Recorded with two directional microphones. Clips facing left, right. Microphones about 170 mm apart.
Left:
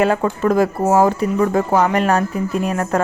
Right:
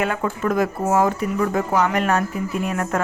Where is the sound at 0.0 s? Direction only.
35° left (ahead or behind).